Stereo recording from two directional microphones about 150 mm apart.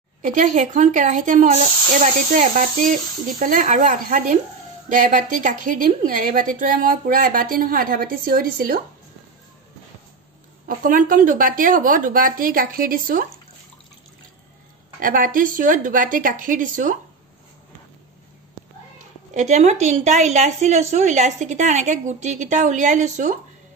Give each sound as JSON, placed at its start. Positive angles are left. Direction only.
{"t": 0.2, "sound": "a woman's voice", "side_deg": -60}
{"t": 10.7, "sound": "a woman's voice", "side_deg": -70}
{"t": 15.0, "sound": "speech", "side_deg": -65}
{"t": 19.3, "sound": "a woman's voice", "side_deg": -50}